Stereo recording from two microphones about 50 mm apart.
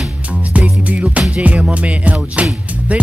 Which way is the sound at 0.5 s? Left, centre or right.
Right.